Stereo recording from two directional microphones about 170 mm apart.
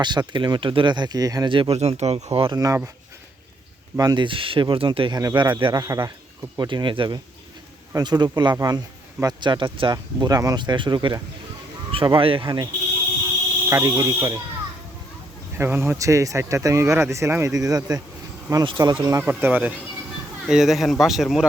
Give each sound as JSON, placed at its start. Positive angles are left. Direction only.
{"t": 0.0, "sound": "speech", "side_deg": -25}
{"t": 2.6, "sound": "speech", "side_deg": -20}
{"t": 3.9, "sound": "speech", "side_deg": -25}
{"t": 13.7, "sound": "speech", "side_deg": -20}
{"t": 15.5, "sound": "speech", "side_deg": -15}
{"t": 19.2, "sound": "speech", "side_deg": -10}